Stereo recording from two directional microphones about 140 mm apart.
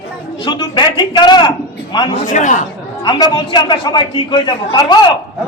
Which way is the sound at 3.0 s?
30° left (ahead or behind).